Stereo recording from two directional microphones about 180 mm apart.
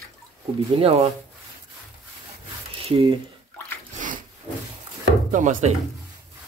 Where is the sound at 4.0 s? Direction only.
45° right (ahead or behind).